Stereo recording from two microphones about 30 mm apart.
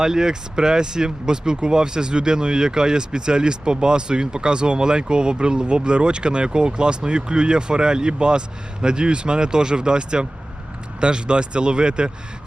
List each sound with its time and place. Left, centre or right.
0.0 s speech: centre